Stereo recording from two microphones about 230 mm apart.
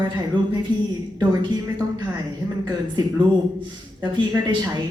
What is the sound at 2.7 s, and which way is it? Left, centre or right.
A woman's voice, centre.